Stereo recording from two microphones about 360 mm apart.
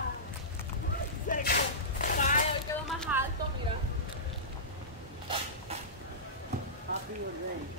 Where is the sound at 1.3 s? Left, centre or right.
Left.